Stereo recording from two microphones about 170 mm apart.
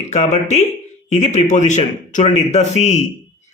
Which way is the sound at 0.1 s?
40° left (ahead or behind).